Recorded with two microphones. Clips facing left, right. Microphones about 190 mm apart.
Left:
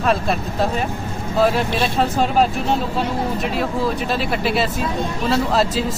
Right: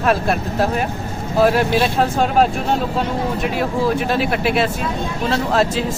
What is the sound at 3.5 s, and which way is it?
Speech, centre (ahead or behind).